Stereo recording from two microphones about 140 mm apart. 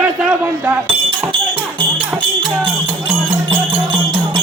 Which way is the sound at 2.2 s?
35° right (ahead or behind).